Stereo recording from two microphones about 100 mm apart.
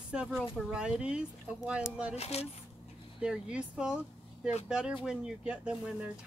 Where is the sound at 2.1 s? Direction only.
90° left.